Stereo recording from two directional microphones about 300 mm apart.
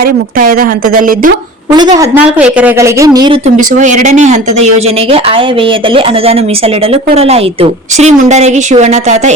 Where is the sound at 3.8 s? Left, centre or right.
Right.